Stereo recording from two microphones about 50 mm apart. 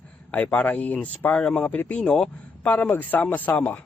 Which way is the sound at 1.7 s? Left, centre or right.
Left.